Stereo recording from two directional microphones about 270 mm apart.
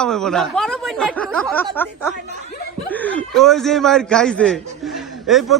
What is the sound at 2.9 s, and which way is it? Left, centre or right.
Speech, centre.